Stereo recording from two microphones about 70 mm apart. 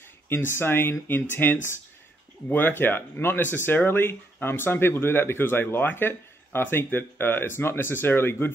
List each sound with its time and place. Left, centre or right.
0.3 s speech: left